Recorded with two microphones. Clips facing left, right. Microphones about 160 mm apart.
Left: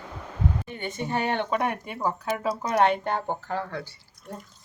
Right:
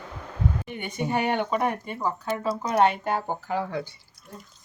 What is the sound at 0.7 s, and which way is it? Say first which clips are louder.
Speech: right 3 dB; 15° right (ahead or behind).